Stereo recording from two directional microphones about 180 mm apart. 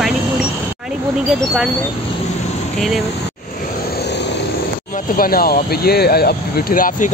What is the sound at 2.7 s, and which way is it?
Speech, centre (ahead or behind).